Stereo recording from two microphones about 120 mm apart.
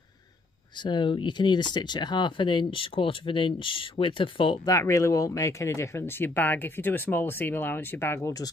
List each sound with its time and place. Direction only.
0.8 s speech: 40° left (ahead or behind)
4.6 s speech: 25° left (ahead or behind)